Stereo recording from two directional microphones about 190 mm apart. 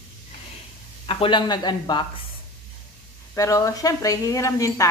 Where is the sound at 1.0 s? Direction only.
25° left (ahead or behind).